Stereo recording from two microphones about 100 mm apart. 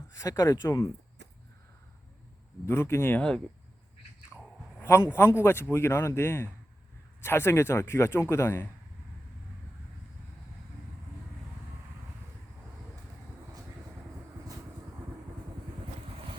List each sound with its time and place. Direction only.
0.1 s speech: 35° left (ahead or behind)
2.6 s speech: 25° left (ahead or behind)
3.2 s speech: 10° left (ahead or behind)
4.8 s a sound: 25° left (ahead or behind)
5.1 s speech: 25° left (ahead or behind)